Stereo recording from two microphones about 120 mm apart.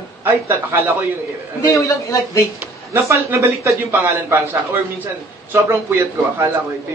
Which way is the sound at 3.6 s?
20° right (ahead or behind).